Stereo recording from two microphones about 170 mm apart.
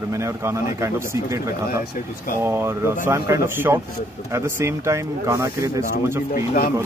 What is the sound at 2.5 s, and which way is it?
A man's voice, 15° right (ahead or behind).